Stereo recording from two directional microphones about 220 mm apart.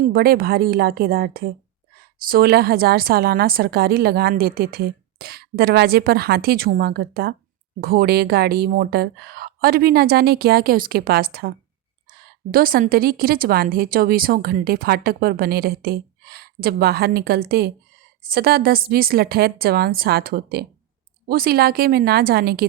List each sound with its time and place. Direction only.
0.0 s a woman's voice: 45° right (ahead or behind)